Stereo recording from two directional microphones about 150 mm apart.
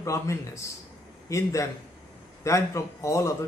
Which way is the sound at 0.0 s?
20° left (ahead or behind).